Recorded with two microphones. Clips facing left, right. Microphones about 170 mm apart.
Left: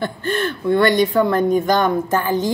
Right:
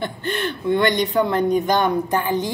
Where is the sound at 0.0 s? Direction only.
20° right (ahead or behind).